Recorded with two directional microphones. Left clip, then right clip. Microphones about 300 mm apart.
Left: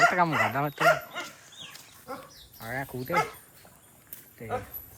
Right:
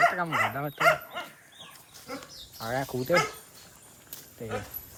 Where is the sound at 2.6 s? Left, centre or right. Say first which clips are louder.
Right 4 dB; centre.